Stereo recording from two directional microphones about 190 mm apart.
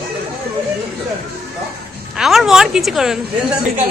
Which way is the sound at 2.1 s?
Centre (ahead or behind).